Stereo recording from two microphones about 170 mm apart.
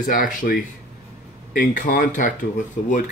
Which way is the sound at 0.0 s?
55° left (ahead or behind).